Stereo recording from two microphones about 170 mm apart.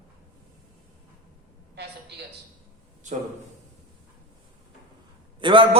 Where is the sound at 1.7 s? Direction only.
75° right (ahead or behind).